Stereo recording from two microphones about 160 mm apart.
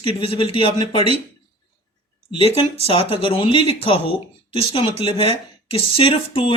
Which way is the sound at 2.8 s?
35° left (ahead or behind).